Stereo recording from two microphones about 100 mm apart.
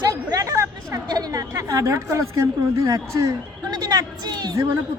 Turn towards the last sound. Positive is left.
turn(degrees=-40)  # may be behind; listen again after turning